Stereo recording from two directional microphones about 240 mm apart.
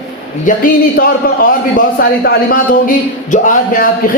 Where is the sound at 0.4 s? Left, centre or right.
Left.